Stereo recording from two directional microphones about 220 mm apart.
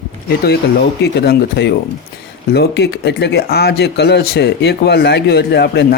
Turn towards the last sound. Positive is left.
turn(degrees=50)  # may be behind; listen again after turning